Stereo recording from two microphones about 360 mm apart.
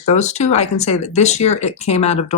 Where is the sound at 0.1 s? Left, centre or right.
Centre.